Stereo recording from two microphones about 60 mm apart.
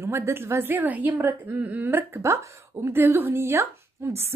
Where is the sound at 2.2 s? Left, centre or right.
Right.